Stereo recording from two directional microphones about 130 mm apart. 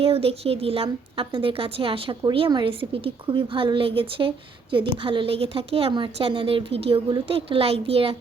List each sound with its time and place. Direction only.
0.0 s a woman's voice: 50° right (ahead or behind)